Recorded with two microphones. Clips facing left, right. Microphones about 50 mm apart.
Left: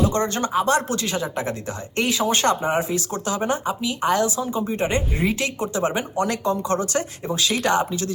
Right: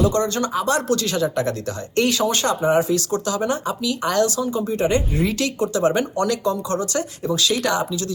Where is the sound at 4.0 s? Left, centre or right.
Centre.